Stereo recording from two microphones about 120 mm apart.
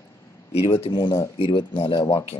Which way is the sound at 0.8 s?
40° left (ahead or behind).